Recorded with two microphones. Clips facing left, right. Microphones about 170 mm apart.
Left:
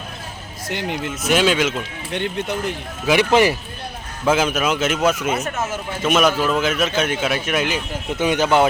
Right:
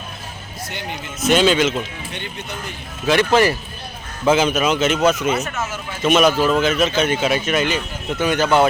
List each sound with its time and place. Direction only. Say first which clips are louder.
0.7 s speech: left 6 dB; 90° left
1.2 s speech: right 3 dB; 5° left (ahead or behind)
2.1 s speech: left 10 dB; 85° left
3.1 s speech: even; 10° left (ahead or behind)
4.3 s speech: right 2 dB; 5° left (ahead or behind)
8.2 s speech: even; 15° left (ahead or behind)